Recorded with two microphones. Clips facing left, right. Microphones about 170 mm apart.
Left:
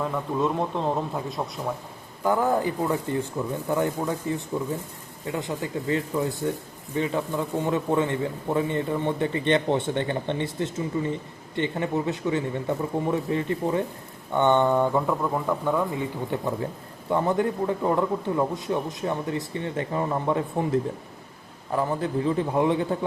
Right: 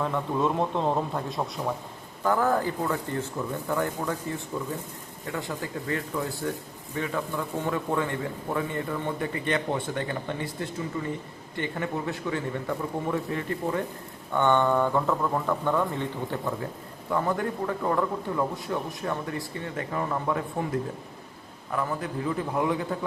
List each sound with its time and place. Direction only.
0.0 s a man's voice: centre (ahead or behind)
2.2 s a man's voice: 15° left (ahead or behind)
21.7 s a man's voice: 30° left (ahead or behind)